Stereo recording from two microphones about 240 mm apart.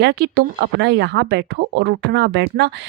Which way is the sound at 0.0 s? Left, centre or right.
Right.